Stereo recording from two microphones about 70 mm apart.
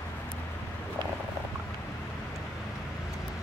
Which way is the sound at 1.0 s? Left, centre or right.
Right.